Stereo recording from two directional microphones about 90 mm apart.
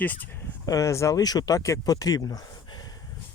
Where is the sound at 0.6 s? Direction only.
40° left (ahead or behind).